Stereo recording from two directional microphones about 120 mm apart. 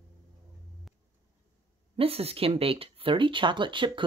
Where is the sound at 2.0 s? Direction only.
55° right (ahead or behind).